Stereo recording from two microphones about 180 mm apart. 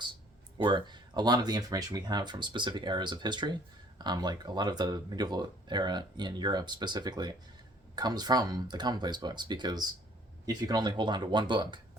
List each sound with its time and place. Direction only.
0.6 s speech: 25° right (ahead or behind)